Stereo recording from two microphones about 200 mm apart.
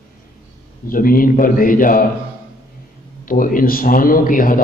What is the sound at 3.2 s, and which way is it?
A man's voice, 45° left (ahead or behind).